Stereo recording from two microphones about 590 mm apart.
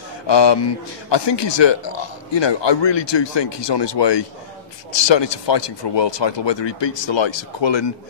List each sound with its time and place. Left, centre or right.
0.3 s speech: left